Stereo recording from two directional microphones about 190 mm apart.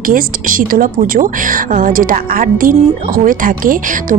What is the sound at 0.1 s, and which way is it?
A woman's voice, 45° right (ahead or behind).